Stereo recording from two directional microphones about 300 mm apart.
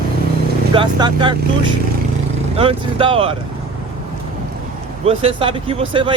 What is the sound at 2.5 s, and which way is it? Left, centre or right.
Speech, centre.